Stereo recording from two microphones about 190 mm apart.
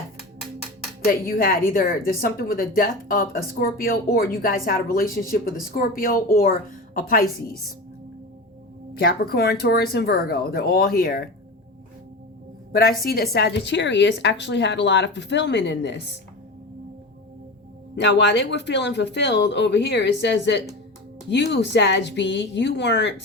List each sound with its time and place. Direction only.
1.4 s a woman's voice: 50° left (ahead or behind)
9.0 s a woman's voice: 55° left (ahead or behind)
12.7 s a woman's voice: 50° left (ahead or behind)
17.9 s a woman's voice: 65° left (ahead or behind)